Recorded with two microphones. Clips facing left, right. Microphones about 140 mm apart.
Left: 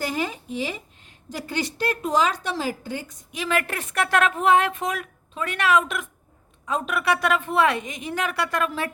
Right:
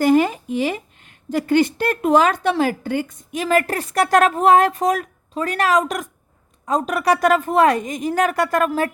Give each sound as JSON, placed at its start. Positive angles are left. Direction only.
{"t": 0.0, "sound": "a woman's voice", "side_deg": -55}